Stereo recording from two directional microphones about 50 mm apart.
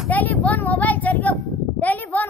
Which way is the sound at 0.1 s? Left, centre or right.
Left.